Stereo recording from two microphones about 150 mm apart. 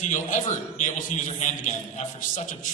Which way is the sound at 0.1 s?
55° left (ahead or behind).